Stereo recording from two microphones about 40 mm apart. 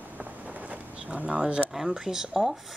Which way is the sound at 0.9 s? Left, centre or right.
Right.